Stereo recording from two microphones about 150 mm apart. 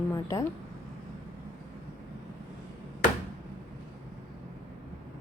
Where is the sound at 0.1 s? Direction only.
20° left (ahead or behind).